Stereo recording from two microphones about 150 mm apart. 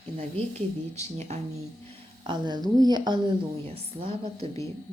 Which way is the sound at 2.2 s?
30° right (ahead or behind).